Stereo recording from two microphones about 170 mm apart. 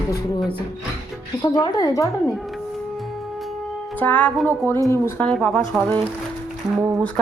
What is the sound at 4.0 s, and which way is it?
Music, 10° left (ahead or behind).